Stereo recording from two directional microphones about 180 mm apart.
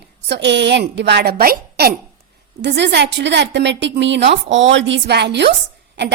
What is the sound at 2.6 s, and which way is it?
A woman's voice, 70° right (ahead or behind).